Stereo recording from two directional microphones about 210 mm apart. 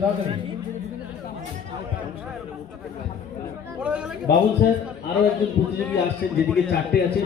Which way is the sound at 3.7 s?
5° right (ahead or behind).